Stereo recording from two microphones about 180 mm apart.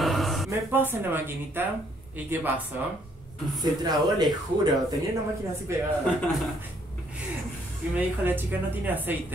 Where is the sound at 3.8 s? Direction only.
25° right (ahead or behind).